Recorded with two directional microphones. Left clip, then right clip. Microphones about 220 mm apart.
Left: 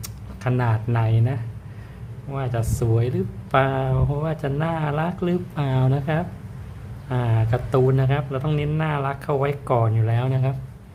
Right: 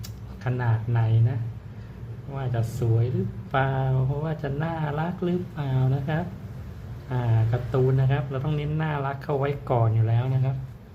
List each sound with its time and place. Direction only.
0.0 s speech: 20° left (ahead or behind)